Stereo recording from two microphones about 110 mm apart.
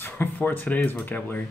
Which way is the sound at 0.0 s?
20° left (ahead or behind).